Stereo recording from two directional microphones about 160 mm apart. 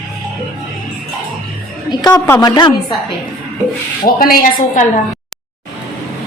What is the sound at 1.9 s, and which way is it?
Speech, 25° left (ahead or behind).